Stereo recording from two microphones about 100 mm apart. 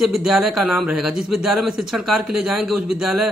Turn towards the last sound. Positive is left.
turn(degrees=-5)  # may be behind; listen again after turning